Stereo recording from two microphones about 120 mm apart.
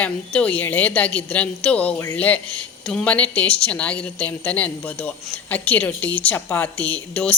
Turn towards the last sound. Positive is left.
turn(degrees=10)  # may be behind; listen again after turning